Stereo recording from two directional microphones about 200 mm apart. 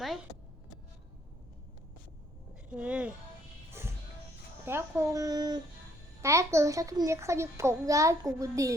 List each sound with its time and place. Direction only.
2.6 s speech: 5° right (ahead or behind)
3.8 s music: 10° right (ahead or behind)
4.6 s a child's voice: 15° right (ahead or behind)